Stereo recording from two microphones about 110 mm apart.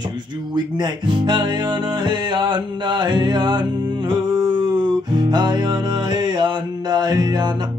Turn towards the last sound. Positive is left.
turn(degrees=-40)  # may be behind; listen again after turning